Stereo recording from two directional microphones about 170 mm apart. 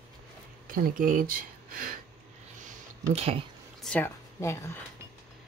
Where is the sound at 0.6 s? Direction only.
55° right (ahead or behind).